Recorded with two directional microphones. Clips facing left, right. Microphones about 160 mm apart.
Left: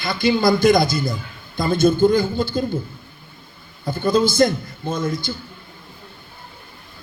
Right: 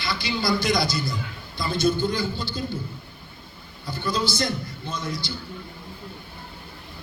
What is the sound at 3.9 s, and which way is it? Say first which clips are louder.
A man's voice: left 9 dB; 50° left (ahead or behind).